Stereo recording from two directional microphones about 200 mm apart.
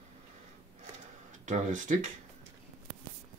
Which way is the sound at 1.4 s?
40° right (ahead or behind).